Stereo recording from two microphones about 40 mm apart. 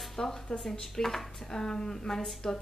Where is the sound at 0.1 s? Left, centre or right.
Centre.